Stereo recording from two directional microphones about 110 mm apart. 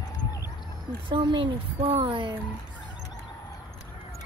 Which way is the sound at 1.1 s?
45° right (ahead or behind).